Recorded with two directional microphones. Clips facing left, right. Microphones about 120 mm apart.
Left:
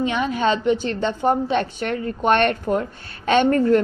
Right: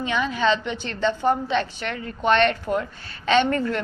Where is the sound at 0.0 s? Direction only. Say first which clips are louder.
Left 2 dB; 45° left (ahead or behind).